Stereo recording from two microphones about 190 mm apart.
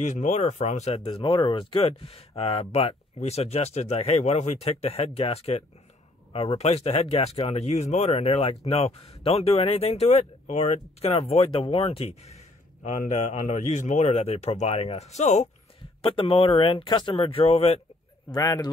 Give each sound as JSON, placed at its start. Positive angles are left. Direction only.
{"t": 0.0, "sound": "speech", "side_deg": 40}
{"t": 18.3, "sound": "speech", "side_deg": 20}